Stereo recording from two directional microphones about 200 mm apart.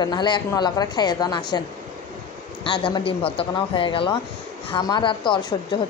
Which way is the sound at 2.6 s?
25° left (ahead or behind).